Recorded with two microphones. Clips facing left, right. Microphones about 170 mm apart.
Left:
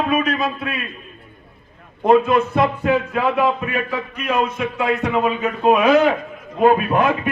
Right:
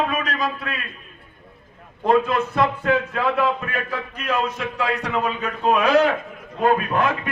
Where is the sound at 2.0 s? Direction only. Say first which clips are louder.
Left 4 dB; 15° left (ahead or behind).